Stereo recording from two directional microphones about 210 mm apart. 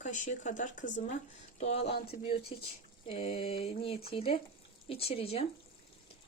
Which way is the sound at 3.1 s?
25° left (ahead or behind).